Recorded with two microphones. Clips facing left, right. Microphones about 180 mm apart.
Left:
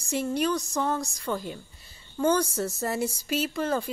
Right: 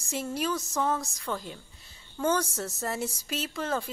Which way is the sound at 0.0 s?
Centre (ahead or behind).